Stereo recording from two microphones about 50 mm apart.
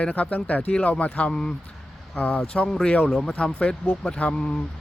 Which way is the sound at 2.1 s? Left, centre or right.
Left.